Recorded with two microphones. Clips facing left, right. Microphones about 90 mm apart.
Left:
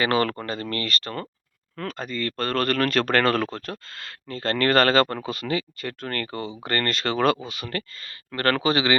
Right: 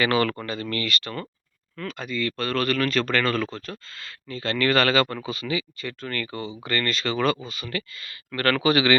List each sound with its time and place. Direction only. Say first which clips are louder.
0.0 s speech: even; 35° left (ahead or behind); by 7.9 s 50° left (ahead or behind)
8.3 s speech: right 1 dB; 35° left (ahead or behind)